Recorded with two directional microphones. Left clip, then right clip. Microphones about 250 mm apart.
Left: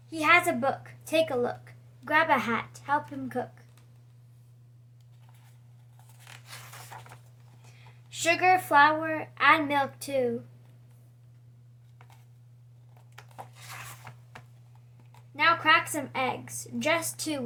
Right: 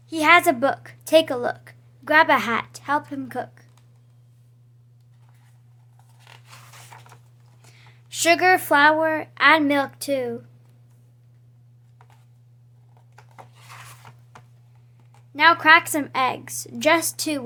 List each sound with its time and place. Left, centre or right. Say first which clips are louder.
0.1 s a woman's voice: right 7 dB; right
6.9 s zipper: left 1 dB; centre
7.6 s speech: right 5 dB; right
13.1 s a sound: left 1 dB; centre
15.4 s a woman's voice: right 8 dB; right